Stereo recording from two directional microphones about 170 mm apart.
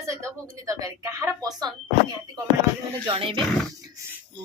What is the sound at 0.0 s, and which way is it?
Speech, 15° right (ahead or behind).